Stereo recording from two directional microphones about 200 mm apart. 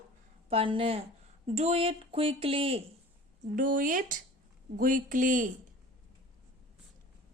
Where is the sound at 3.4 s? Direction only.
40° right (ahead or behind).